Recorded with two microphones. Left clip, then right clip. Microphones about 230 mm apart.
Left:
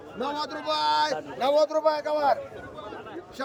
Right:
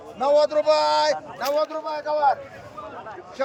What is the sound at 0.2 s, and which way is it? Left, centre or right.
A man's voice, centre.